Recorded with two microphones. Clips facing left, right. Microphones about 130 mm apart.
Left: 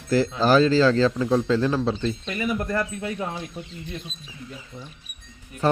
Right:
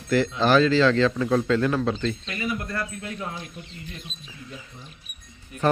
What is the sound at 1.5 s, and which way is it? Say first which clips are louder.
Speech: left 1 dB; 25° left (ahead or behind).